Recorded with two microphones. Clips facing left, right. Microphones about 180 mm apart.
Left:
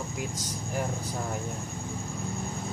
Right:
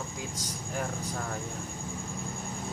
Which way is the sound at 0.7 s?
15° left (ahead or behind).